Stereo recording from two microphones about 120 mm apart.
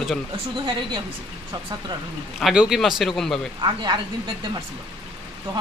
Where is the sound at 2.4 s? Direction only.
5° right (ahead or behind).